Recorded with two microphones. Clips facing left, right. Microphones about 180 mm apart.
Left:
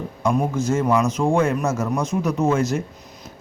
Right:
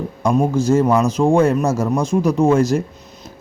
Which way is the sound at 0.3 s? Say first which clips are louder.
Right 5 dB; 30° right (ahead or behind).